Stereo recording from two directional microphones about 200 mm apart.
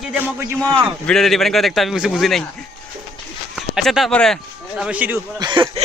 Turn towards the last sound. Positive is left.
turn(degrees=-25)  # may be behind; listen again after turning